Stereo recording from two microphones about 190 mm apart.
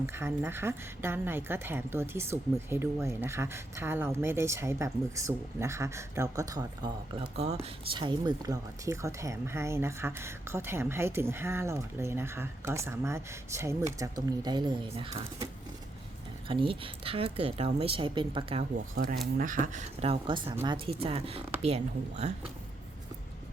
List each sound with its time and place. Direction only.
0.0 s speech: 10° right (ahead or behind)
7.3 s speech: 35° right (ahead or behind)
16.5 s a woman's voice: 30° right (ahead or behind)
19.4 s a woman's voice: 45° right (ahead or behind)